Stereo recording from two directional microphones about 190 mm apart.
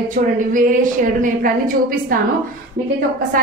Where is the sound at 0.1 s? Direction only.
45° right (ahead or behind).